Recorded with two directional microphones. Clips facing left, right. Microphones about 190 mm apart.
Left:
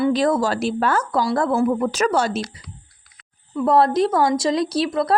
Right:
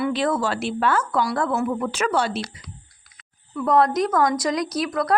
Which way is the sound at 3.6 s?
30° left (ahead or behind).